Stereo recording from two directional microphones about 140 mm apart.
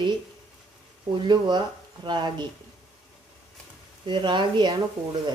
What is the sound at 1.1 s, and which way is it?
Speech, 35° right (ahead or behind).